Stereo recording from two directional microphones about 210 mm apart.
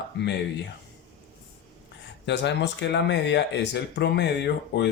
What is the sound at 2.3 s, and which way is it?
Speech, 55° left (ahead or behind).